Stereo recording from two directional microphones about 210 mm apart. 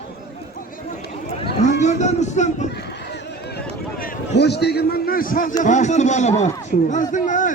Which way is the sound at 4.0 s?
45° left (ahead or behind).